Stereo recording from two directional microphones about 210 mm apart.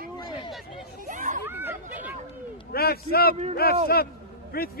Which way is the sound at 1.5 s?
10° right (ahead or behind).